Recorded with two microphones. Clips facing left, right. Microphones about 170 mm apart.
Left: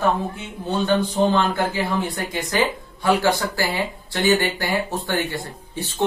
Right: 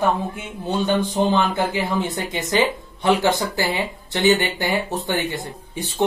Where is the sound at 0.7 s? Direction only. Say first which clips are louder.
Even; 15° right (ahead or behind).